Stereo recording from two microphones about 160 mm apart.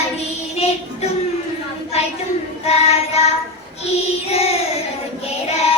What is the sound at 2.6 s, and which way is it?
Female singing, 40° left (ahead or behind).